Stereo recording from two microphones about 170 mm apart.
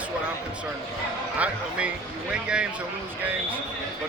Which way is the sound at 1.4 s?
5° right (ahead or behind).